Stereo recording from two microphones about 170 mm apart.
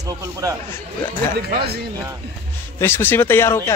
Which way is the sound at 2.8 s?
15° left (ahead or behind).